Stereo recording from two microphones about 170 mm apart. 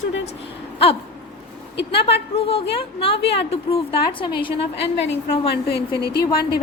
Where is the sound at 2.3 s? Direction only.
35° left (ahead or behind).